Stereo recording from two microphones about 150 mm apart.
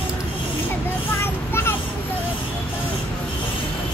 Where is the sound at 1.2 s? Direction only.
15° left (ahead or behind).